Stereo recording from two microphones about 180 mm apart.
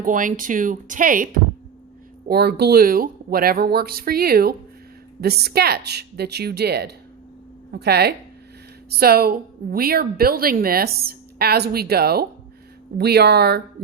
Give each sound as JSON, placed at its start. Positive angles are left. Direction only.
{"t": 0.0, "sound": "speech", "side_deg": -45}
{"t": 2.2, "sound": "a woman's voice", "side_deg": -60}